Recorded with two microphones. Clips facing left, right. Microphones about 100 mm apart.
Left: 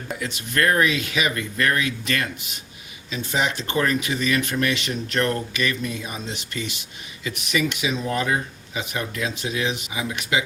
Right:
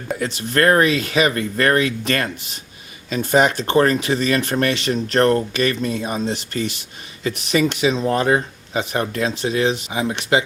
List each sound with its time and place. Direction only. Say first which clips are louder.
0.2 s speech: right 5 dB; 35° right (ahead or behind)